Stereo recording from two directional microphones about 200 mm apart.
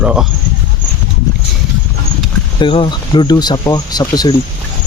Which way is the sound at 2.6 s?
25° left (ahead or behind).